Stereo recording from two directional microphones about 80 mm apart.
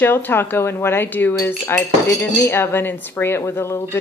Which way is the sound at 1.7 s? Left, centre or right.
Left.